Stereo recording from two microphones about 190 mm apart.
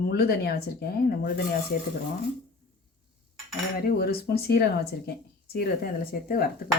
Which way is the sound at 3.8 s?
55° left (ahead or behind).